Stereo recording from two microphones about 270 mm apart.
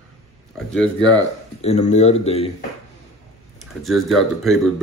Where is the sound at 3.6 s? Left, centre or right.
Centre.